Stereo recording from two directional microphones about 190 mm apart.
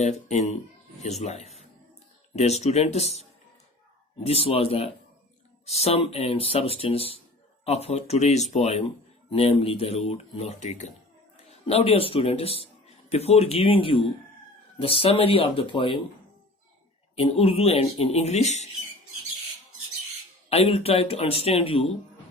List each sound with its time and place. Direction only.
0.3 s a man's voice: 35° left (ahead or behind)
17.2 s speech: 30° left (ahead or behind)
20.5 s speech: 30° left (ahead or behind)